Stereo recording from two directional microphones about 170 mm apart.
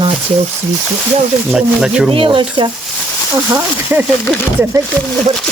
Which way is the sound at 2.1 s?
30° right (ahead or behind).